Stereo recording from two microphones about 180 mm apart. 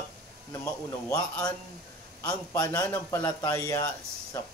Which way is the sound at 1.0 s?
20° left (ahead or behind).